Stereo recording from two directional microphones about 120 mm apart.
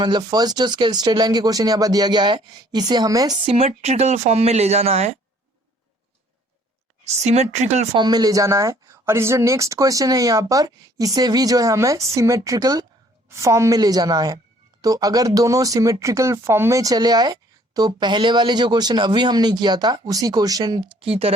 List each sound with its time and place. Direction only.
0.0 s speech: 35° right (ahead or behind)
3.4 s speech: 55° right (ahead or behind)
7.0 s speech: 70° right (ahead or behind)
7.9 s a woman's voice: 35° right (ahead or behind)
21.0 s speech: 50° right (ahead or behind)